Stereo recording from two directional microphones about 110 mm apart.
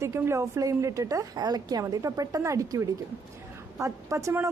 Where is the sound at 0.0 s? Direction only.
25° right (ahead or behind).